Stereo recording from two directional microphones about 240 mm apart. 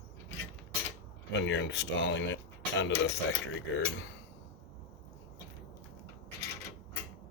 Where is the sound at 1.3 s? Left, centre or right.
Left.